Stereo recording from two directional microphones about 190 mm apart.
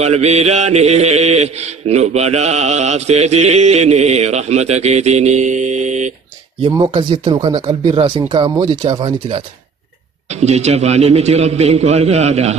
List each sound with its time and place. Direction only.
0.0 s mantra: 35° right (ahead or behind)
6.6 s speech: 25° right (ahead or behind)
10.2 s mantra: 35° right (ahead or behind)